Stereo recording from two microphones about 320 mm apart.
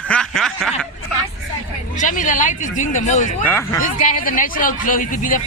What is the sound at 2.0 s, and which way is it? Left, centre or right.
A woman's voice, left.